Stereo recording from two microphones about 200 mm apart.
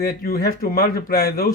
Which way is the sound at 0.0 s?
50° left (ahead or behind).